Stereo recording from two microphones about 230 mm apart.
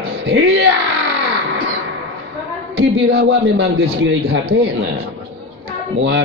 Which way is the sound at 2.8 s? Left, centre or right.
Right.